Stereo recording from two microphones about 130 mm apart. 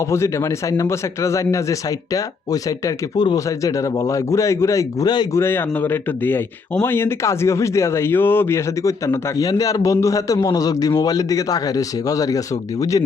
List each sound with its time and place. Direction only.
0.1 s speech: 20° left (ahead or behind)
5.4 s speech: 15° left (ahead or behind)